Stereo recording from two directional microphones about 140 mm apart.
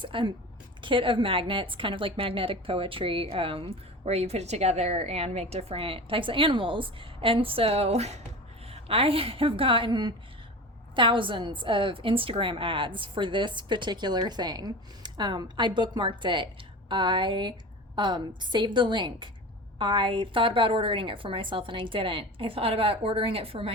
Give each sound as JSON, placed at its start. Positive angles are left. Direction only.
{"t": 0.0, "sound": "a woman's voice", "side_deg": -35}